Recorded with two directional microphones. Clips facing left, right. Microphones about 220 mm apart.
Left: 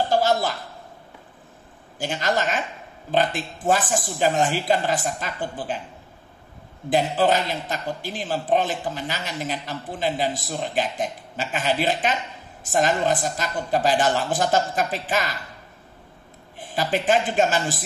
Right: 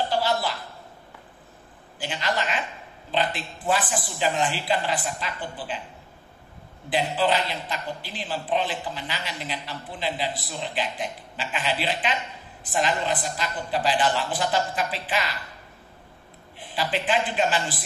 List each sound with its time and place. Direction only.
0.1 s a sound: 45° left (ahead or behind)
2.0 s a man's voice: 45° left (ahead or behind)
6.9 s a man's voice: 45° left (ahead or behind)
16.5 s a man's voice: 45° left (ahead or behind)